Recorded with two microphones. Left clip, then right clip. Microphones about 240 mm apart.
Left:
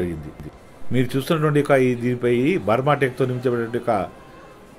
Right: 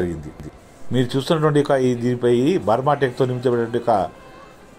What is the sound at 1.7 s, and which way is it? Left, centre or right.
Speech, left.